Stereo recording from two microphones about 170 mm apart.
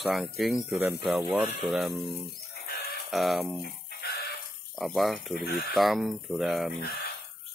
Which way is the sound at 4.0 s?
65° left (ahead or behind).